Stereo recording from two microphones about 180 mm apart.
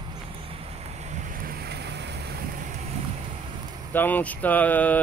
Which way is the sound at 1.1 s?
60° right (ahead or behind).